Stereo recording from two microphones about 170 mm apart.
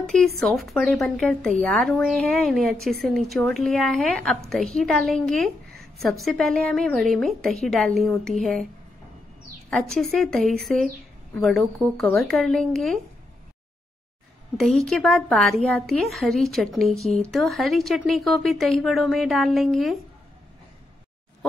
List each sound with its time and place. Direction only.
0.4 s a woman's voice: centre (ahead or behind)
9.7 s a woman's voice: centre (ahead or behind)
14.6 s a woman's voice: centre (ahead or behind)